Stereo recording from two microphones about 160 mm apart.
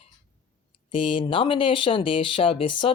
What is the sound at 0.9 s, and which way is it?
Speech, 30° left (ahead or behind).